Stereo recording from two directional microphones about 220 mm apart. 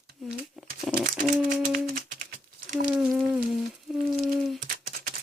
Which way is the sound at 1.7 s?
35° right (ahead or behind).